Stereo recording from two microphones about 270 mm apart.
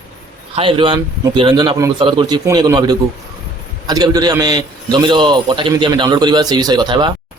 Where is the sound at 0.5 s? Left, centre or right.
Centre.